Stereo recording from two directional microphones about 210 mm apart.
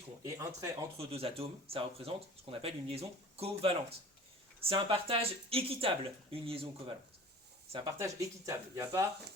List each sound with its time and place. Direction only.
0.2 s speech: 15° right (ahead or behind)
0.9 s speech: 30° right (ahead or behind)
4.7 s speech: 25° right (ahead or behind)